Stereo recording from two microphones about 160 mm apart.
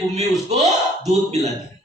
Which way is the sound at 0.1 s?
45° right (ahead or behind).